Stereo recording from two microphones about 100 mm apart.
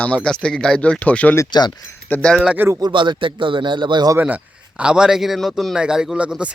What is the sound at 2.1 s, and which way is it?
Speech, 15° left (ahead or behind).